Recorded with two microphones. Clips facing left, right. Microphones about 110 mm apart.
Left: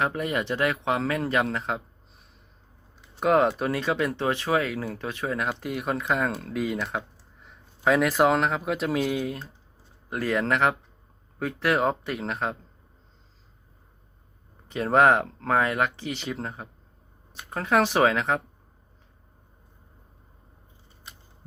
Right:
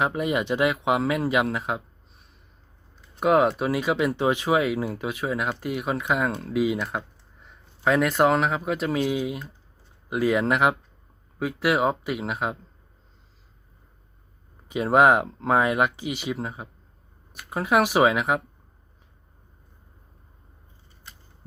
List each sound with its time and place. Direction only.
0.0 s speech: 15° right (ahead or behind)
3.2 s speech: 5° right (ahead or behind)
14.7 s speech: 10° right (ahead or behind)